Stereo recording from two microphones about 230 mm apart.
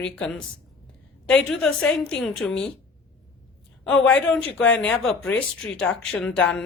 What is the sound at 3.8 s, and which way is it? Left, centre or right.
Speech, centre.